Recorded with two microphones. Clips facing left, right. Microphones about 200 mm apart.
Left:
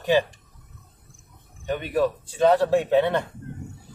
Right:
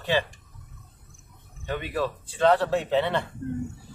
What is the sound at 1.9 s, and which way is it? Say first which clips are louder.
Speech: left 8 dB; 15° left (ahead or behind).